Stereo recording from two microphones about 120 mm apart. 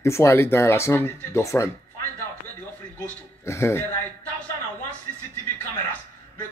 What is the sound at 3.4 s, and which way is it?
Speech, 25° left (ahead or behind).